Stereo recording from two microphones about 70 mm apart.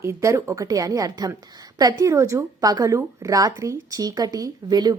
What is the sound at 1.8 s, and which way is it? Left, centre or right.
A woman's voice, right.